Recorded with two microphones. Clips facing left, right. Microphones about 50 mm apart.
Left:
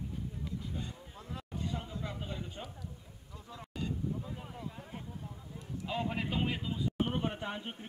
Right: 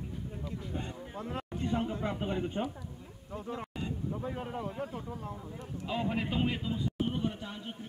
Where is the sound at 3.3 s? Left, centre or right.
Right.